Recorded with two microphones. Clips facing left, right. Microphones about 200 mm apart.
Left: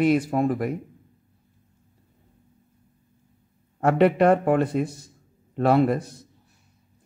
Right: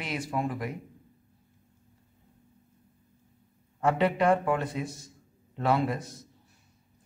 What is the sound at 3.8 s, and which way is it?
Speech, 60° left (ahead or behind).